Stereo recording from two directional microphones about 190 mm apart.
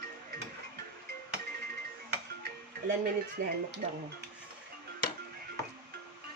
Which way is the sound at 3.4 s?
50° right (ahead or behind).